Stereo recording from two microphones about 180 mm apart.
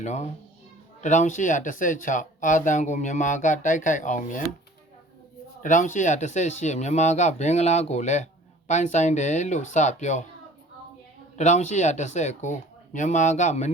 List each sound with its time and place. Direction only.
0.0 s speech: 40° left (ahead or behind)
5.6 s speech: 45° left (ahead or behind)
11.3 s speech: 40° left (ahead or behind)